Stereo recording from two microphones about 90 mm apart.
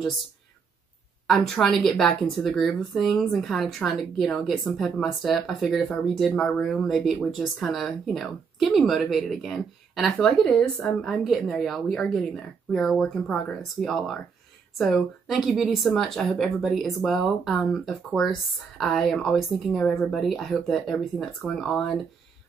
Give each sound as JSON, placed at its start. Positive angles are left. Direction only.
{"t": 1.2, "sound": "a woman's voice", "side_deg": 0}